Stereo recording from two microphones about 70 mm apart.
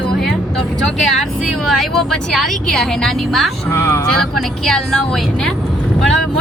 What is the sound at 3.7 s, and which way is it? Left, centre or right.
Speech, left.